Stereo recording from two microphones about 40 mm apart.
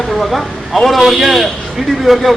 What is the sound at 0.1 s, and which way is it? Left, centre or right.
Speech, centre.